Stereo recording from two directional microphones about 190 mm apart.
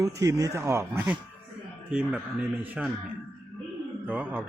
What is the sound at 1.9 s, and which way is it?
Speech, 5° right (ahead or behind).